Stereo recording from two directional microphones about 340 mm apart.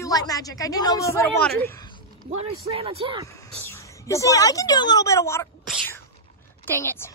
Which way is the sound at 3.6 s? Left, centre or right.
Centre.